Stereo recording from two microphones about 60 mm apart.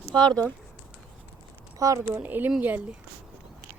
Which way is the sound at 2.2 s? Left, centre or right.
Right.